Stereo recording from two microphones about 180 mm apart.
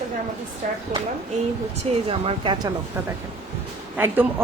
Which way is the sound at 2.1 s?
30° right (ahead or behind).